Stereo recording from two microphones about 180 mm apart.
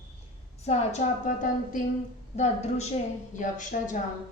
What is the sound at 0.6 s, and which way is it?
A woman's voice, 35° left (ahead or behind).